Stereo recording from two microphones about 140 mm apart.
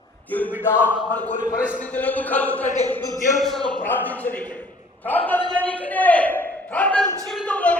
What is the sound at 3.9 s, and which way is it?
A man's voice, 10° left (ahead or behind).